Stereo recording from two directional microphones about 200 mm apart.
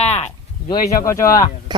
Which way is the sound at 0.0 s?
30° left (ahead or behind).